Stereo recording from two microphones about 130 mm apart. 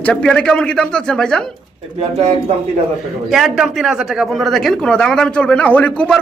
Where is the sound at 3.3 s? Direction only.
Centre (ahead or behind).